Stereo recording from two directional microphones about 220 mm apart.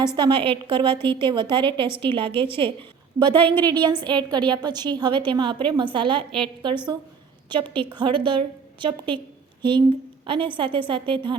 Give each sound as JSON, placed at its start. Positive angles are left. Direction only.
{"t": 0.2, "sound": "a woman's voice", "side_deg": -20}
{"t": 3.4, "sound": "a woman's voice", "side_deg": 10}
{"t": 3.7, "sound": "a woman's voice", "side_deg": -20}